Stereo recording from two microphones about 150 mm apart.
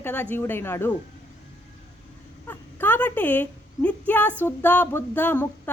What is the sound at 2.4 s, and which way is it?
A woman's voice, 15° left (ahead or behind).